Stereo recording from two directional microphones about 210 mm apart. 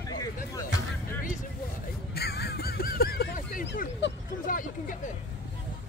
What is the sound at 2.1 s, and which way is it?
Honk, 50° left (ahead or behind).